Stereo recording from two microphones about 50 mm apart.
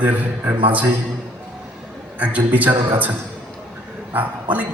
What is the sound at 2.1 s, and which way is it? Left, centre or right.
Speech, right.